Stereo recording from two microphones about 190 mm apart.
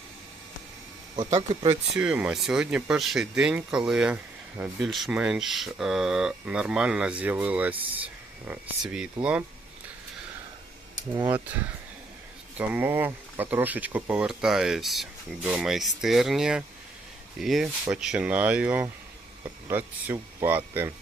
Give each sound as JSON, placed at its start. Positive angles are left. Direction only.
{"t": 1.2, "sound": "speech", "side_deg": -35}
{"t": 2.0, "sound": "speech", "side_deg": -5}
{"t": 12.5, "sound": "speech", "side_deg": -10}